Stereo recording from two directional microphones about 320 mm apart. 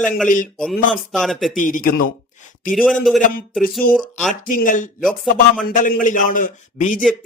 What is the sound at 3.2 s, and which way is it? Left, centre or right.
A man's voice, left.